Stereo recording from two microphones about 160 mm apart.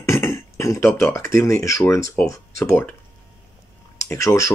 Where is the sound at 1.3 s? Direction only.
15° left (ahead or behind).